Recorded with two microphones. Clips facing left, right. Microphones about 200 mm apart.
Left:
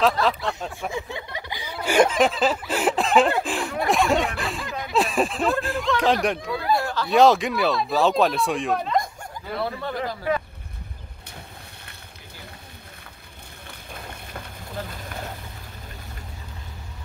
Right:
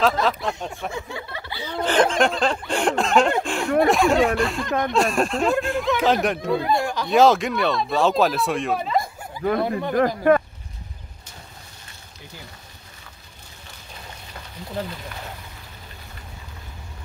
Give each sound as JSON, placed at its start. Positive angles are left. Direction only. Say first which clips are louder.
{"t": 0.0, "sound": "speech", "louder": "even", "side_deg": 0}
{"t": 0.9, "sound": "a sound", "louder": "left 1 dB", "side_deg": 15}
{"t": 5.9, "sound": "speech", "louder": "left 1 dB", "side_deg": 0}
{"t": 6.8, "sound": "a sound", "louder": "right 2 dB", "side_deg": -15}
{"t": 7.1, "sound": "speech", "louder": "even", "side_deg": 0}
{"t": 9.6, "sound": "speech", "louder": "right 4 dB", "side_deg": -15}
{"t": 9.9, "sound": "speech", "louder": "right 11 dB", "side_deg": -55}